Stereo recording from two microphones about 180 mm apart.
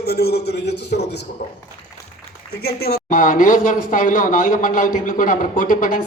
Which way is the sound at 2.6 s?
60° left (ahead or behind).